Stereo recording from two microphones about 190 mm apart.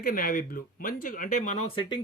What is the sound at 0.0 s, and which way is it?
Speech, 50° left (ahead or behind).